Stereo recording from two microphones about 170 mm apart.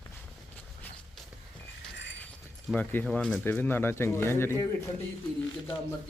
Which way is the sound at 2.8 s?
10° left (ahead or behind).